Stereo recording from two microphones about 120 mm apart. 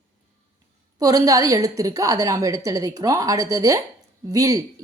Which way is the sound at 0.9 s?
30° right (ahead or behind).